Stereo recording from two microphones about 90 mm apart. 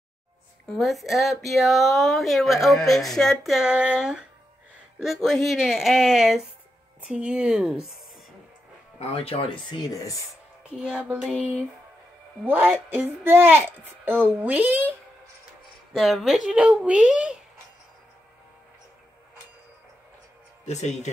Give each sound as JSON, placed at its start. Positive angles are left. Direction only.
{"t": 0.7, "sound": "speech", "side_deg": 0}
{"t": 5.0, "sound": "a woman's voice", "side_deg": 0}
{"t": 9.1, "sound": "speech", "side_deg": 90}
{"t": 9.8, "sound": "speech", "side_deg": 40}
{"t": 10.6, "sound": "music", "side_deg": -10}
{"t": 11.2, "sound": "a woman's voice", "side_deg": -15}
{"t": 15.9, "sound": "a woman's voice", "side_deg": 0}